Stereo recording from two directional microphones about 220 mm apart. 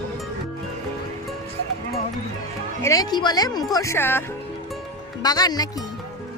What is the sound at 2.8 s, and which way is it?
Music, 15° left (ahead or behind).